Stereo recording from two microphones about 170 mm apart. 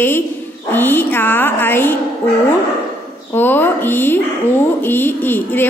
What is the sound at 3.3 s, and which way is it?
A woman's voice, 10° left (ahead or behind).